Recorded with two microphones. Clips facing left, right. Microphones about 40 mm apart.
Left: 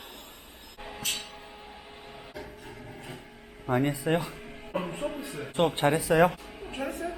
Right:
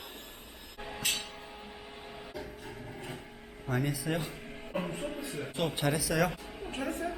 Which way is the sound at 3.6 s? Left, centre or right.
Left.